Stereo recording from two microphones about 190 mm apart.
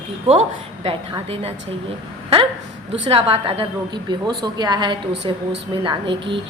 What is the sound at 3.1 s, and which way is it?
A woman's voice, 30° right (ahead or behind).